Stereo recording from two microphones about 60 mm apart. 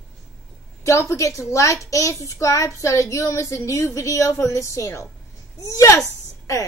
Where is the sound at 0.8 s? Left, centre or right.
Left.